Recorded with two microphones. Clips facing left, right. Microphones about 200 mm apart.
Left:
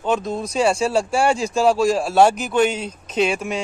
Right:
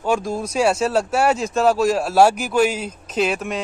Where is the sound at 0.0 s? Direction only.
10° right (ahead or behind).